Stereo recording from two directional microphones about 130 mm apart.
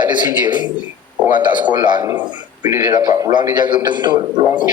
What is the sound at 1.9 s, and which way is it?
Speech, 30° right (ahead or behind).